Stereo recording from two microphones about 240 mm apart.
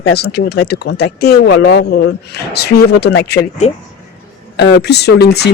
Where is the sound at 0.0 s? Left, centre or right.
Left.